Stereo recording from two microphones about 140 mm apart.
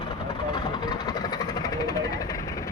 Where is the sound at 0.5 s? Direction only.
30° left (ahead or behind).